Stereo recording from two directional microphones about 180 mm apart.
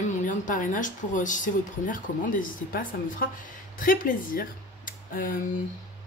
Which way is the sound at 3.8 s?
50° left (ahead or behind).